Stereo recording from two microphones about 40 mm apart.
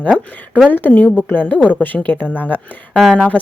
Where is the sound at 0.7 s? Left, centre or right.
Left.